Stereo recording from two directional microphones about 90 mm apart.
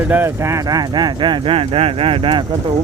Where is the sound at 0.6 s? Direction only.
45° right (ahead or behind); by 2.3 s 85° right.